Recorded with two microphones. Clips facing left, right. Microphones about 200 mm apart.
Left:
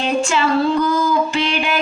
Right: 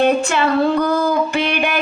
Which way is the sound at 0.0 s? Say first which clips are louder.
Right 3 dB; 60° right (ahead or behind).